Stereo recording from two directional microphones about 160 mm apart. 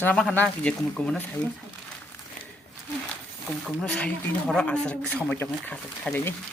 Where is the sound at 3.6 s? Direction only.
5° left (ahead or behind).